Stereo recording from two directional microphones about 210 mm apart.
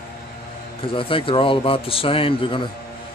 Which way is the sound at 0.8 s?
25° left (ahead or behind).